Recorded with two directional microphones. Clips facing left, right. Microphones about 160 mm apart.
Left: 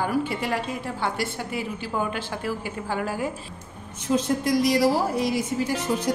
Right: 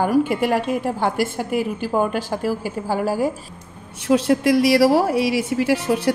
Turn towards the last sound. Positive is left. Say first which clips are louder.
# right 6 dB
turn(degrees=-70)  # may be behind; listen again after turning